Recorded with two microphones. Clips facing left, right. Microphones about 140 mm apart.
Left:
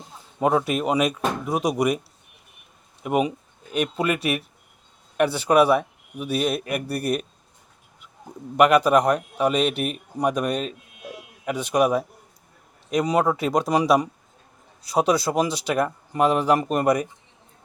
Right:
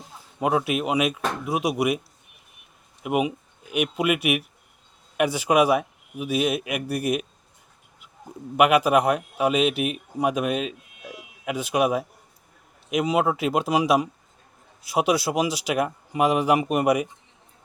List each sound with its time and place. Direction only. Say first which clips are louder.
0.3 s speech: left 2 dB; 5° right (ahead or behind)
3.0 s speech: left 1 dB; 5° right (ahead or behind)
8.5 s speech: left 2 dB; 5° right (ahead or behind)